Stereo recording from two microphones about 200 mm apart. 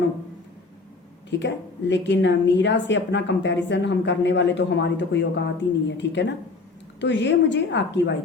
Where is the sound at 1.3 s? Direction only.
60° left (ahead or behind).